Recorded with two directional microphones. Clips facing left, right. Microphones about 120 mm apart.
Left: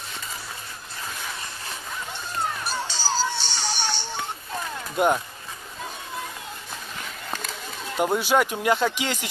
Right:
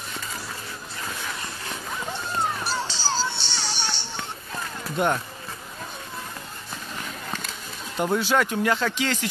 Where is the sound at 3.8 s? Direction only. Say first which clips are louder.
Left 3 dB; 45° left (ahead or behind).